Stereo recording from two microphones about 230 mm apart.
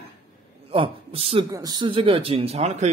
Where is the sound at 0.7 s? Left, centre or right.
Right.